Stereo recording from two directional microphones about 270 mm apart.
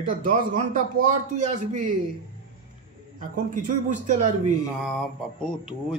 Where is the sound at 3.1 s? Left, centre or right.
Right.